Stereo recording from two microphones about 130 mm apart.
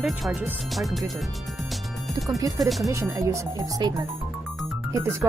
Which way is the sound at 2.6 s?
Centre (ahead or behind).